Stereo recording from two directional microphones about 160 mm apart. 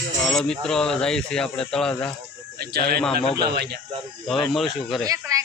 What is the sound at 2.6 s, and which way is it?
Speech, 75° right (ahead or behind).